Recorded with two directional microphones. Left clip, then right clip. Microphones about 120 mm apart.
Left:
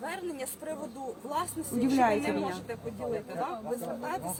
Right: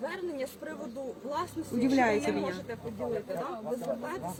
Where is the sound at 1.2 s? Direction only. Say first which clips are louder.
Left 2 dB; 30° left (ahead or behind).